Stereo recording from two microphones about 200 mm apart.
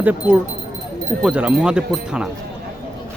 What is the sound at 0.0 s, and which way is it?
Speech, 10° right (ahead or behind).